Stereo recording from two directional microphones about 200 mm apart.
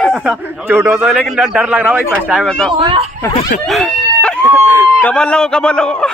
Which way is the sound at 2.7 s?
25° right (ahead or behind).